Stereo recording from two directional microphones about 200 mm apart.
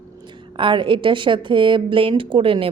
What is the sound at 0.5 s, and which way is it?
A woman's voice, 25° right (ahead or behind).